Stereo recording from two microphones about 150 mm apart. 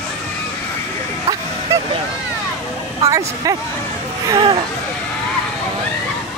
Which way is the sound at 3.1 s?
25° right (ahead or behind).